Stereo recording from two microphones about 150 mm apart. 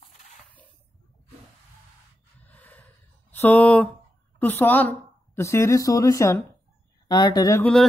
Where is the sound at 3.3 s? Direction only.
10° left (ahead or behind).